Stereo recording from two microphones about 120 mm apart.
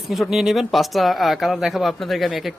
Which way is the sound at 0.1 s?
Centre (ahead or behind).